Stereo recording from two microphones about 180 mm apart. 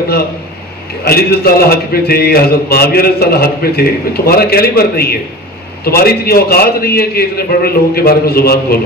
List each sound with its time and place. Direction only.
1.0 s a man's voice: 60° left (ahead or behind)